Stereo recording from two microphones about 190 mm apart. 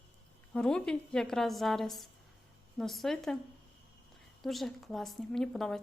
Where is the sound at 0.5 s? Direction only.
5° left (ahead or behind).